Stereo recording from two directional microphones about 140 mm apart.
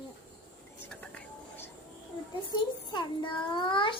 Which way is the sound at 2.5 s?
35° left (ahead or behind).